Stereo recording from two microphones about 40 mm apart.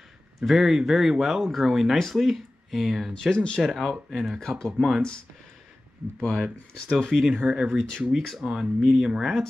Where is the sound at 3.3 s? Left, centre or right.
Left.